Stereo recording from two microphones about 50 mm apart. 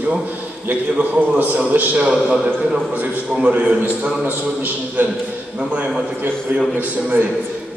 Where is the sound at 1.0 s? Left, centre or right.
Right.